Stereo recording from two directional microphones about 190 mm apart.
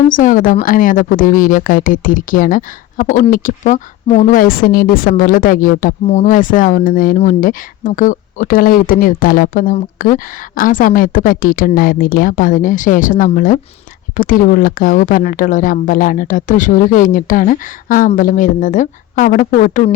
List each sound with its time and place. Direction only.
0.1 s speech: 45° left (ahead or behind)